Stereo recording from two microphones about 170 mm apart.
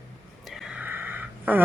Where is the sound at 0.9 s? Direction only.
10° right (ahead or behind).